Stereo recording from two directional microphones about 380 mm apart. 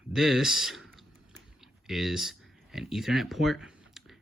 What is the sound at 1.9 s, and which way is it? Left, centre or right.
Speech, centre.